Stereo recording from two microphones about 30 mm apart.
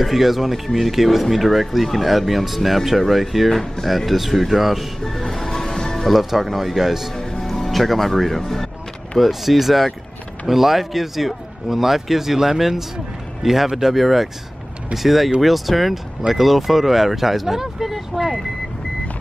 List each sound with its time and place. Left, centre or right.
0.0 s speech: centre
0.7 s speech: centre
5.0 s music: centre
6.0 s speech: centre
7.2 s music: left
7.7 s speech: centre
9.2 s speech: centre